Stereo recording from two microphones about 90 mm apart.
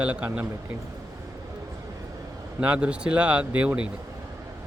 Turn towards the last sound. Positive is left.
turn(degrees=-15)  # may be behind; listen again after turning